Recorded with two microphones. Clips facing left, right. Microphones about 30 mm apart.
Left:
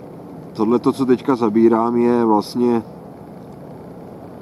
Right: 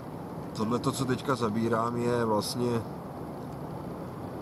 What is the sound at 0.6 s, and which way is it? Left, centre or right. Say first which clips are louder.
Speech: left 13 dB; left.